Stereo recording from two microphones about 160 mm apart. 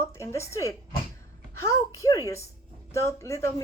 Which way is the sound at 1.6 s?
20° left (ahead or behind).